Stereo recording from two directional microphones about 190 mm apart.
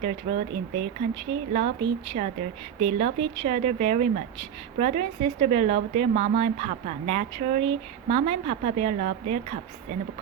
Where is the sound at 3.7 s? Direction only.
40° right (ahead or behind).